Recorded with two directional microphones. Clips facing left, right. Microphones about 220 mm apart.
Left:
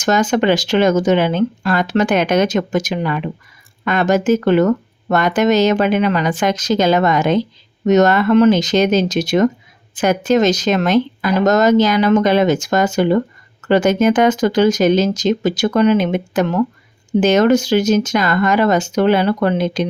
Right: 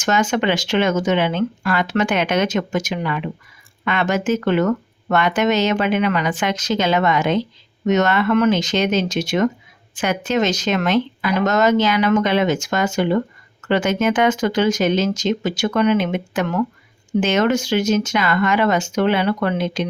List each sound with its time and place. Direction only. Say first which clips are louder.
0.0 s speech: left 4 dB; 35° left (ahead or behind)